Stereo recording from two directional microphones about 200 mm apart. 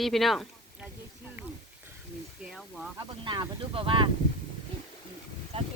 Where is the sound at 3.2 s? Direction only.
20° right (ahead or behind).